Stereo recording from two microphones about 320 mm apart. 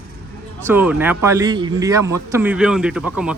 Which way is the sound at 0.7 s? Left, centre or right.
Centre.